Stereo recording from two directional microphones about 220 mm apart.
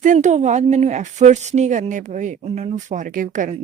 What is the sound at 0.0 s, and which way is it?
Speech, 35° right (ahead or behind).